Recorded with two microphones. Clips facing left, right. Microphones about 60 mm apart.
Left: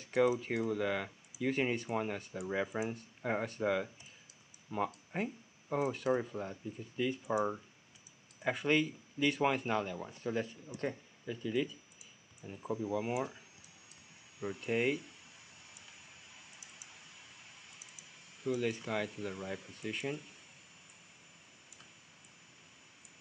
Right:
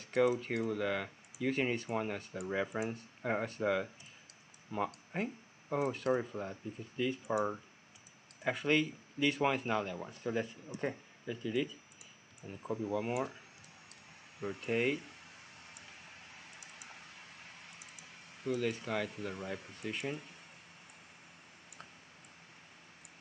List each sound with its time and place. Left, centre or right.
0.0 s speech: centre
4.6 s clicking: centre
6.1 s speech: centre
12.6 s speech: centre
14.5 s speech: centre
16.1 s a sound: right
18.5 s speech: centre